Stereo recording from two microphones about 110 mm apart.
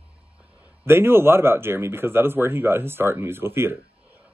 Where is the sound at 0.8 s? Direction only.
20° right (ahead or behind).